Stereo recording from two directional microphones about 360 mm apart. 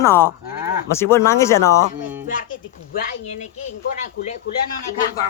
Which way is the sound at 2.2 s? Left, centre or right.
Left.